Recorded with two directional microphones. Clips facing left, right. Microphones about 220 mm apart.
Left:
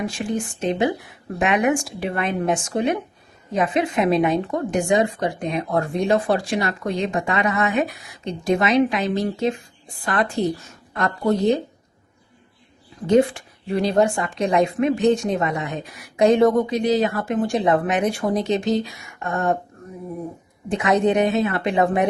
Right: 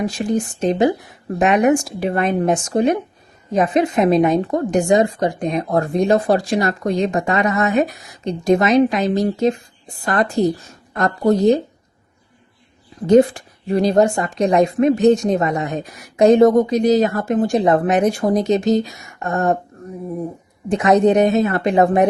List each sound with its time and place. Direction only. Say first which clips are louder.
0.0 s a woman's voice: right 5 dB; 40° right (ahead or behind)
13.1 s a woman's voice: right 5 dB; 40° right (ahead or behind)
20.7 s a woman's voice: right 5 dB; 40° right (ahead or behind)